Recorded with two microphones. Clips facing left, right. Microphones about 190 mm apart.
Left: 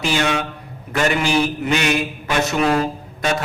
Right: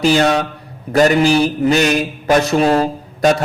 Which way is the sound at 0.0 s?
40° right (ahead or behind).